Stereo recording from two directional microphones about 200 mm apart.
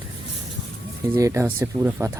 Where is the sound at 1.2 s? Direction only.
15° right (ahead or behind).